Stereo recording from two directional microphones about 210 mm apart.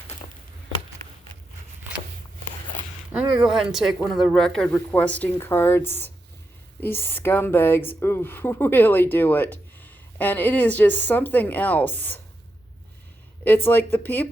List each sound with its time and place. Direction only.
3.1 s speech: 5° right (ahead or behind)
13.7 s speech: 10° left (ahead or behind)